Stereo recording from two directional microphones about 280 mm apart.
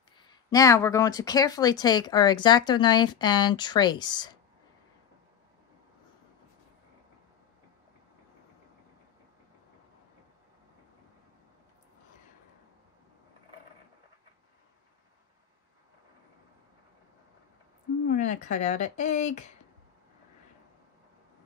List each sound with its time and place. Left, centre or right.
0.2 s speech: centre
18.0 s speech: left